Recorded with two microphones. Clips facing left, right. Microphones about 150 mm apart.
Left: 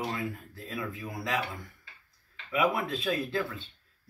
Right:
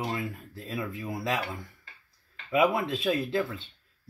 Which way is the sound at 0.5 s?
25° right (ahead or behind).